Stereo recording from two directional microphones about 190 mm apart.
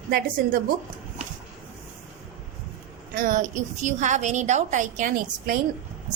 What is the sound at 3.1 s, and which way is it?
A woman's voice, 45° right (ahead or behind).